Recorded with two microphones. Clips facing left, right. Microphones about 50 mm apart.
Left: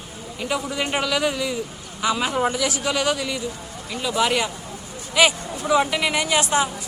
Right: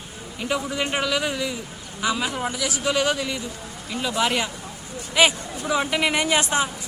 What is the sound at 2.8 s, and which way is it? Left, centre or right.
A woman's voice, centre.